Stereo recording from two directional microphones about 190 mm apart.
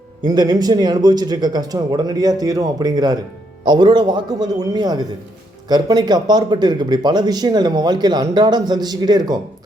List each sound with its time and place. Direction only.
0.3 s a man's voice: 20° right (ahead or behind)